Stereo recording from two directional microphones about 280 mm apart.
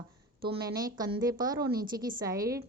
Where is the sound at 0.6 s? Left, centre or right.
Centre.